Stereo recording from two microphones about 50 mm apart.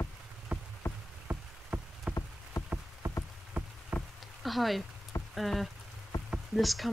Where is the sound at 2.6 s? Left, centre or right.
Left.